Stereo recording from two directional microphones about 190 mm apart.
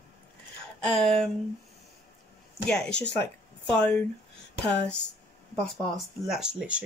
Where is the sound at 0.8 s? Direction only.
5° left (ahead or behind).